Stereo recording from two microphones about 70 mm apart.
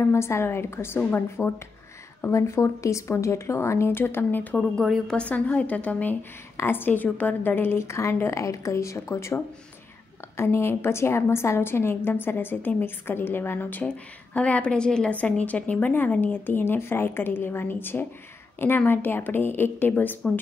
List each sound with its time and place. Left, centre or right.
0.0 s a woman's voice: left
2.3 s speech: left
5.0 s speech: centre
6.5 s a woman's voice: left